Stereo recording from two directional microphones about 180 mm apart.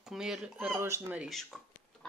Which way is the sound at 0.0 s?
5° right (ahead or behind).